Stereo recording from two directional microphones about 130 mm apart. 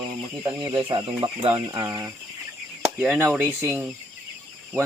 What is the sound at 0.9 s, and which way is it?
Speech, 45° right (ahead or behind).